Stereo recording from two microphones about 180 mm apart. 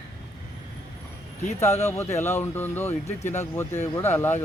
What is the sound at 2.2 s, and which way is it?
Speech, 10° left (ahead or behind).